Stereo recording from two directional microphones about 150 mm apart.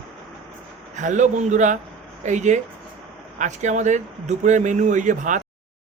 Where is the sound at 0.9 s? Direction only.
55° right (ahead or behind).